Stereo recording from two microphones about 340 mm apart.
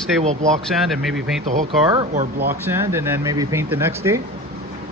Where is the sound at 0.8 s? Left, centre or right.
Centre.